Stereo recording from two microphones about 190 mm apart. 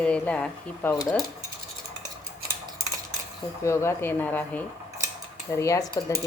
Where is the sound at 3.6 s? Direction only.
15° left (ahead or behind).